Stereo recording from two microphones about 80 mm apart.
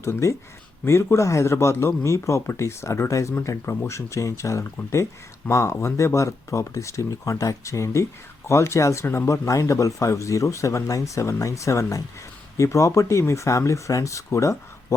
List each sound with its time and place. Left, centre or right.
0.0 s speech: left